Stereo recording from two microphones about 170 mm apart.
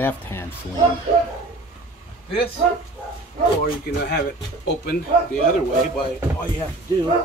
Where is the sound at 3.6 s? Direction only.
70° left (ahead or behind).